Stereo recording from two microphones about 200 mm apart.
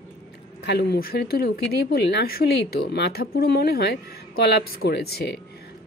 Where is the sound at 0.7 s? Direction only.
55° left (ahead or behind).